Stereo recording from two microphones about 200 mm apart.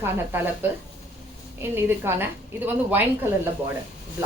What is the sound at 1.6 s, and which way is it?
Speech, 10° right (ahead or behind).